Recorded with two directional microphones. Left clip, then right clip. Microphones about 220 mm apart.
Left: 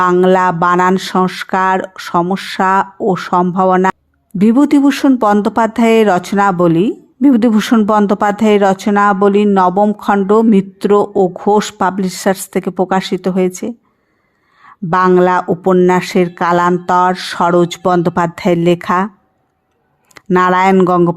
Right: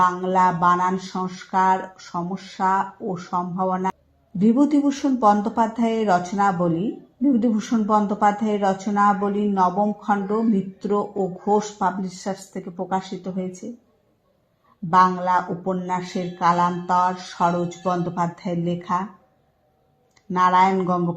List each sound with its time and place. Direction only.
0.0 s speech: 40° left (ahead or behind)
14.8 s speech: 40° left (ahead or behind)
20.3 s speech: 40° left (ahead or behind)